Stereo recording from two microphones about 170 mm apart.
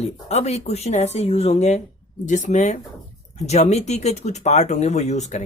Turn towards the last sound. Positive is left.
turn(degrees=40)  # may be behind; listen again after turning